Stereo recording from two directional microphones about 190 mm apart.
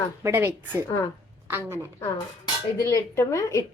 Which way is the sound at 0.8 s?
20° left (ahead or behind).